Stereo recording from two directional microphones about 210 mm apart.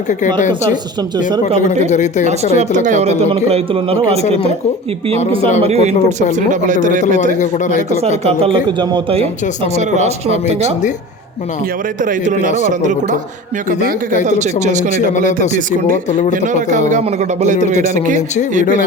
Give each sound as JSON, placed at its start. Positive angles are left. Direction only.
{"t": 0.1, "sound": "speech", "side_deg": 35}
{"t": 1.9, "sound": "speech", "side_deg": 35}
{"t": 2.2, "sound": "speech", "side_deg": -30}
{"t": 5.6, "sound": "speech", "side_deg": -30}
{"t": 7.3, "sound": "speech", "side_deg": 35}
{"t": 8.2, "sound": "speech", "side_deg": -25}
{"t": 12.0, "sound": "speech", "side_deg": -40}
{"t": 14.3, "sound": "speech", "side_deg": -35}
{"t": 16.3, "sound": "speech", "side_deg": -35}